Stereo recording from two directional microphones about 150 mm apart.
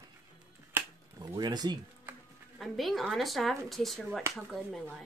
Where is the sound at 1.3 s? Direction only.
30° right (ahead or behind).